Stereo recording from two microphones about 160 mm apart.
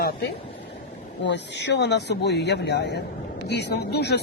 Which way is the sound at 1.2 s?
90° left.